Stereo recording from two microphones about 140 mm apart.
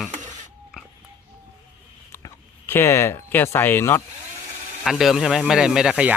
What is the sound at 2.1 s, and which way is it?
Speech, 15° left (ahead or behind).